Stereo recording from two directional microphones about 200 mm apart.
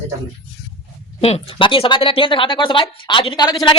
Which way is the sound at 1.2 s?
30° left (ahead or behind).